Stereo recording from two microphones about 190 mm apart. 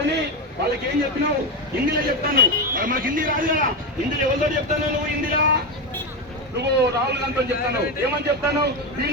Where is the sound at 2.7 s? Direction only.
45° right (ahead or behind).